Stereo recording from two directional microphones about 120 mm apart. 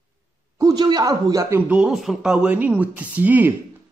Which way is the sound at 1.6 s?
10° right (ahead or behind).